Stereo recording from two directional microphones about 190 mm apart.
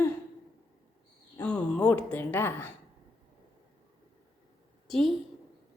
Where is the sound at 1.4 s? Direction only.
5° left (ahead or behind).